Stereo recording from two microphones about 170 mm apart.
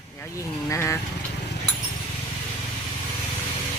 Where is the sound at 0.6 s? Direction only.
15° left (ahead or behind).